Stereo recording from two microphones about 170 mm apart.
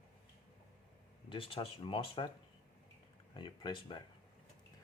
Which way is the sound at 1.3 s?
35° left (ahead or behind).